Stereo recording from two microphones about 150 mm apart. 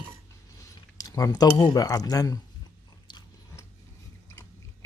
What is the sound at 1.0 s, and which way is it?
Speech, 25° left (ahead or behind).